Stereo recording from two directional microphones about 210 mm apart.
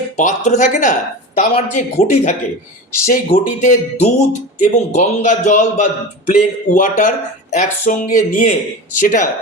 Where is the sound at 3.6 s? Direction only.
35° left (ahead or behind).